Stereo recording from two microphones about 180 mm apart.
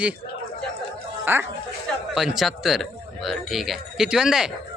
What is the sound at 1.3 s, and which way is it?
Speech, 10° right (ahead or behind).